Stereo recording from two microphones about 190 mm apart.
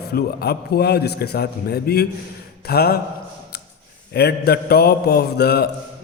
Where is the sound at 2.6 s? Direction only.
55° left (ahead or behind).